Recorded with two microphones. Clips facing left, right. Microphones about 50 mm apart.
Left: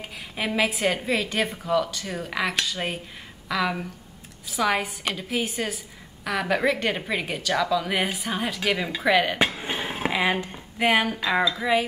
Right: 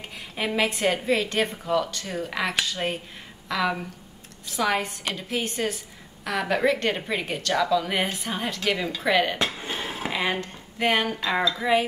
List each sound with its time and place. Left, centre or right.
0.4 s a woman's voice: centre
9.6 s a sound: centre
10.1 s speech: centre